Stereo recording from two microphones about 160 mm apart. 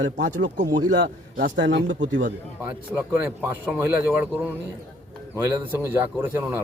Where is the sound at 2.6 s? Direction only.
10° right (ahead or behind).